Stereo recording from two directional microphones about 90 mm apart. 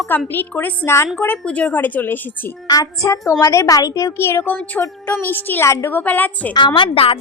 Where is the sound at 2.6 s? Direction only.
45° left (ahead or behind).